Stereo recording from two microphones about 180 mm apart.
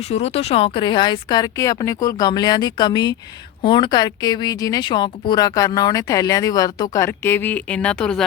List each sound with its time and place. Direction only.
0.1 s a woman's voice: 35° left (ahead or behind); by 8.2 s 5° left (ahead or behind)